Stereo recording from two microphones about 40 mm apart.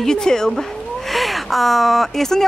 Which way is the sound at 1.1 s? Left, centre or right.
Centre.